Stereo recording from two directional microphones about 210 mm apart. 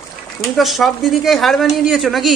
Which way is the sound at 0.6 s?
Centre (ahead or behind).